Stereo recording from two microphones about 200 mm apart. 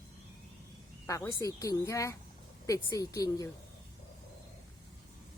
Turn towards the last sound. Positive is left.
turn(degrees=15)  # may be behind; listen again after turning